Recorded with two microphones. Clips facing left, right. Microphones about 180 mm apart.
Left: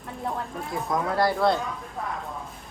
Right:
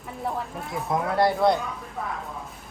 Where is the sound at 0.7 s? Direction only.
25° right (ahead or behind).